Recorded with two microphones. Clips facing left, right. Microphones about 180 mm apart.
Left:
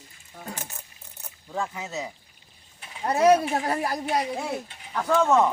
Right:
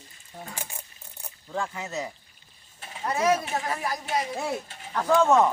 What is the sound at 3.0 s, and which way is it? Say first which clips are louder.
Speech: left 5 dB; 35° left (ahead or behind).